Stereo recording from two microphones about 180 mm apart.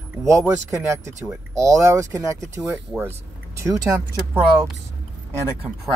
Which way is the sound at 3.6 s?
20° right (ahead or behind).